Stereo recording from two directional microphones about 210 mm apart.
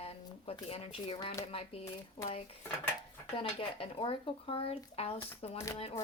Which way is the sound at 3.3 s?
25° left (ahead or behind).